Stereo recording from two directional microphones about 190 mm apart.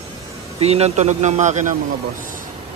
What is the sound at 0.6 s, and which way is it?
A man's voice, 35° right (ahead or behind).